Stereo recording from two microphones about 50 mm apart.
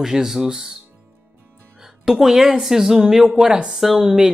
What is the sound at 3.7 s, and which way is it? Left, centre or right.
Speech, centre.